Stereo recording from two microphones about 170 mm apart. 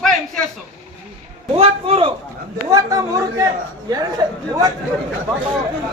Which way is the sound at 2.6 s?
20° right (ahead or behind).